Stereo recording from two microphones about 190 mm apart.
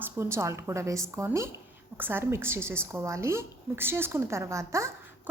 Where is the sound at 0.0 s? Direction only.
15° right (ahead or behind).